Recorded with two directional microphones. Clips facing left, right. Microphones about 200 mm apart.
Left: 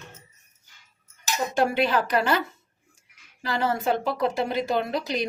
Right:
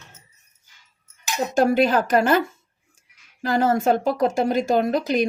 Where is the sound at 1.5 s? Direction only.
45° right (ahead or behind).